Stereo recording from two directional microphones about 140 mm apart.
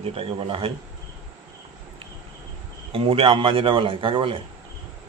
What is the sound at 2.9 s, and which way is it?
Speech, 40° right (ahead or behind).